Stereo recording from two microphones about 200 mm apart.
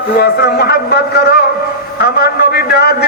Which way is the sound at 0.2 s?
50° left (ahead or behind).